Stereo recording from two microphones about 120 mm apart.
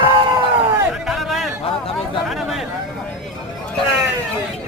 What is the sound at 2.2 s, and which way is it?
Chatter, centre (ahead or behind).